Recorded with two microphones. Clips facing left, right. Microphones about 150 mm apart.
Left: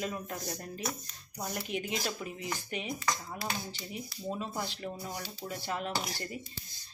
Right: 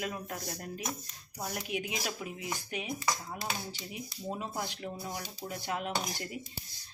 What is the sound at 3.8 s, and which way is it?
Speech, 20° right (ahead or behind).